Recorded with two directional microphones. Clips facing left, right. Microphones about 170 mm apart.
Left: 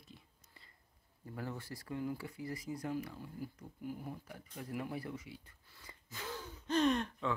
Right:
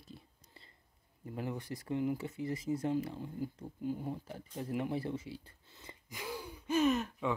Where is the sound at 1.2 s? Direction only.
20° right (ahead or behind).